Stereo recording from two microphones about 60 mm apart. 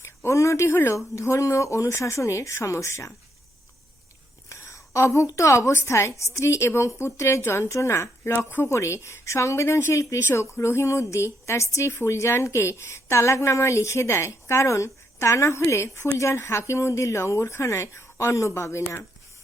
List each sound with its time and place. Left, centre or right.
0.0 s speech: left
4.4 s a sound: left
5.4 s a woman's voice: left
8.3 s a woman's voice: left